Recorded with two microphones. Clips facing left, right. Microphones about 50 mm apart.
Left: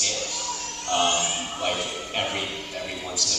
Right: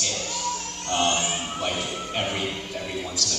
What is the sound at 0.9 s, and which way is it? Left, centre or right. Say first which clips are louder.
Speech: even; centre.